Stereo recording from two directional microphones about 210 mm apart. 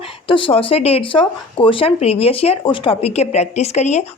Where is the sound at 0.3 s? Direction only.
25° left (ahead or behind).